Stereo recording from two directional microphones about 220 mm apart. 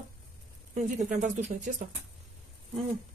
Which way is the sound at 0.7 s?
35° right (ahead or behind).